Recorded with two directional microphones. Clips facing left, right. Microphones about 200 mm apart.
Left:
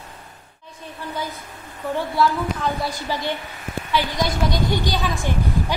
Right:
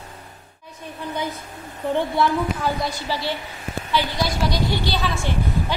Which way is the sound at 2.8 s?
15° left (ahead or behind).